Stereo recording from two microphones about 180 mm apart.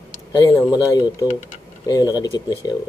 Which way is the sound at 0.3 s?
25° left (ahead or behind).